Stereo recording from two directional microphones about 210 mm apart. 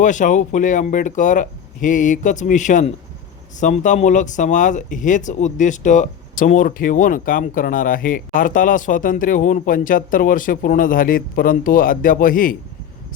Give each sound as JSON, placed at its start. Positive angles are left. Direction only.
{"t": 0.0, "sound": "speech", "side_deg": 35}